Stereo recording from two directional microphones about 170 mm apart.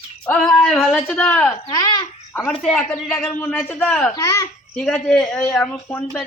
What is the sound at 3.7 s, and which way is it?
Speech, 10° left (ahead or behind).